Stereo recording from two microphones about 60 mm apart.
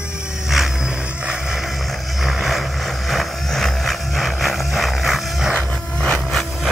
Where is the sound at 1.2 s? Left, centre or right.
Centre.